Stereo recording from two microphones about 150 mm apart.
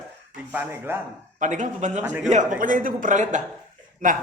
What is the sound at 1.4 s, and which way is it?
Speech, 55° right (ahead or behind).